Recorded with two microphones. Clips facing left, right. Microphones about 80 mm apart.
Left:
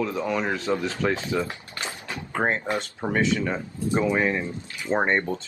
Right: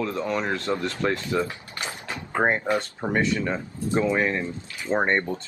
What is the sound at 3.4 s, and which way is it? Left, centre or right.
Speech, centre.